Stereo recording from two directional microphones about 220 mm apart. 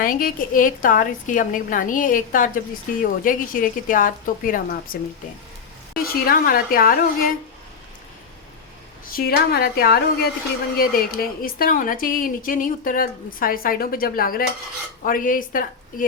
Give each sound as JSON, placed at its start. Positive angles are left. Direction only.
{"t": 0.0, "sound": "a woman's voice", "side_deg": 40}
{"t": 6.0, "sound": "a woman's voice", "side_deg": 40}
{"t": 9.0, "sound": "a woman's voice", "side_deg": 45}